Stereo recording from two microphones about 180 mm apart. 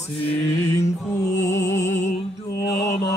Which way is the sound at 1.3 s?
15° left (ahead or behind).